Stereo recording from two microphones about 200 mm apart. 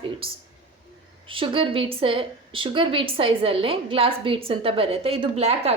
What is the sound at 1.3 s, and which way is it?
A woman's voice, 25° right (ahead or behind).